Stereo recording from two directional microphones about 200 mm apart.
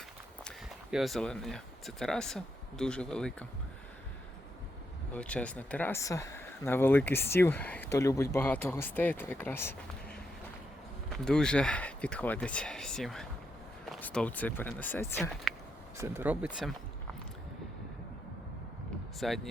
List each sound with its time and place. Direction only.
0.4 s speech: centre (ahead or behind)
5.1 s speech: 5° left (ahead or behind)
16.0 s speech: 10° right (ahead or behind)
19.2 s speech: centre (ahead or behind)